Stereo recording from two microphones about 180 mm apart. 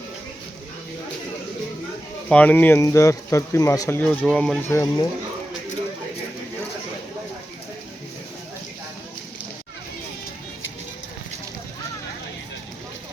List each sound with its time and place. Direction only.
2.3 s speech: 10° left (ahead or behind)
4.7 s speech: 15° left (ahead or behind)